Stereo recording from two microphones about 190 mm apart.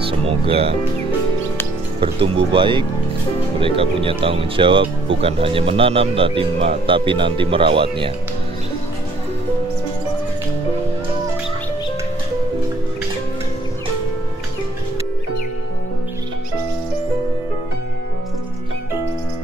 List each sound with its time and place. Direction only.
0.0 s speech: 30° right (ahead or behind)
2.0 s speech: 30° right (ahead or behind)